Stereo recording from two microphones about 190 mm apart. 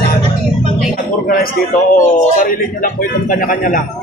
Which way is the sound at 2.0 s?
50° left (ahead or behind).